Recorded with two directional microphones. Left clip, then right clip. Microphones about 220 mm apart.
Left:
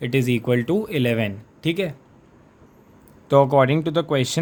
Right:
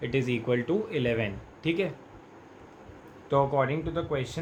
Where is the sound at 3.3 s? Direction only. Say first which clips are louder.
Left 9 dB; 45° left (ahead or behind).